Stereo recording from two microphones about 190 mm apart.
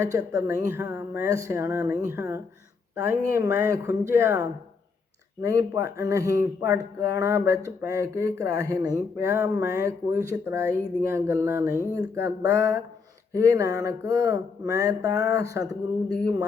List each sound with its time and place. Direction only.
0.0 s speech: 15° right (ahead or behind)